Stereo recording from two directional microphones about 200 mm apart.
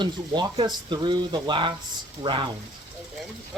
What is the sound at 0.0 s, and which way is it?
Speech, 20° right (ahead or behind).